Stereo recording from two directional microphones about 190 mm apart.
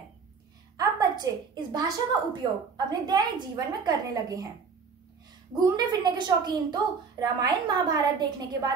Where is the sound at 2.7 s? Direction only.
20° right (ahead or behind).